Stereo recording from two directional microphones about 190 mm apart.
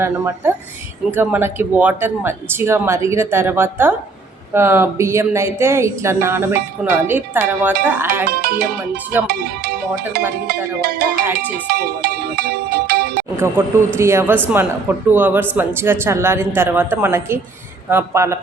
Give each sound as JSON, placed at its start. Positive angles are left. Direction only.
{"t": 0.0, "sound": "speech", "side_deg": -15}
{"t": 8.3, "sound": "speech", "side_deg": -55}
{"t": 11.7, "sound": "music", "side_deg": -55}
{"t": 13.3, "sound": "speech", "side_deg": -15}